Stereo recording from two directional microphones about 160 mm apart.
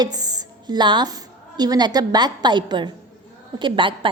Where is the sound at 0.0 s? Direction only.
25° right (ahead or behind).